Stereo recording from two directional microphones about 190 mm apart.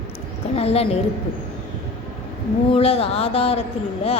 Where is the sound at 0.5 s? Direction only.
30° left (ahead or behind).